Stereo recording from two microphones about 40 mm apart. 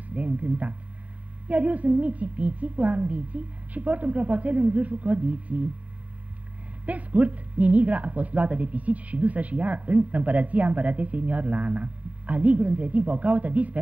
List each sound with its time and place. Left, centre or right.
0.1 s a woman's voice: right
6.9 s a woman's voice: right